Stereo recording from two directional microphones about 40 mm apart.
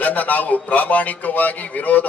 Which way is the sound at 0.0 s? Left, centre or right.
Left.